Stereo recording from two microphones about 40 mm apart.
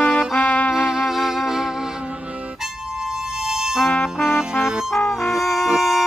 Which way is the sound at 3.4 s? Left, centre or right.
Centre.